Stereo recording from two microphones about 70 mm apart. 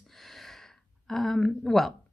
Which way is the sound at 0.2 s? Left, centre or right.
Centre.